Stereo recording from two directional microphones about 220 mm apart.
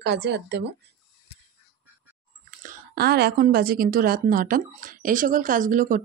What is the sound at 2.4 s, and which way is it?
Speech, 40° right (ahead or behind).